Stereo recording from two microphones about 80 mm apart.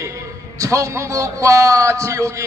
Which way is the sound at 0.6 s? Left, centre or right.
Right.